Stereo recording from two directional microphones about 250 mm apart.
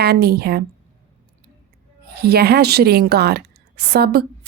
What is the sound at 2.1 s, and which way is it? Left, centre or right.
A woman's voice, right.